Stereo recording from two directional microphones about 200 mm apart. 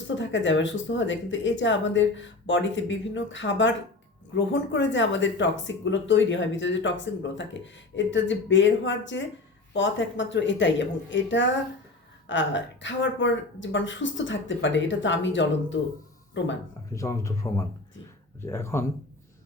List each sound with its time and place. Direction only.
0.1 s speech: 65° left (ahead or behind)
16.9 s speech: 15° left (ahead or behind)